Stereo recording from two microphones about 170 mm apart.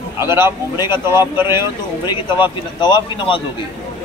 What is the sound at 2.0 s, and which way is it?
Speech, 30° left (ahead or behind).